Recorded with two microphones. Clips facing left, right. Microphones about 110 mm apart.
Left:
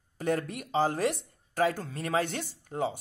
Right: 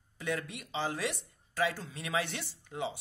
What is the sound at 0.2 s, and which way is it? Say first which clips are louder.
Speech: left 6 dB; 45° left (ahead or behind).